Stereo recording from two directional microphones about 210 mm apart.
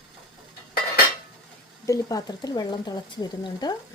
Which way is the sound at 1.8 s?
15° left (ahead or behind).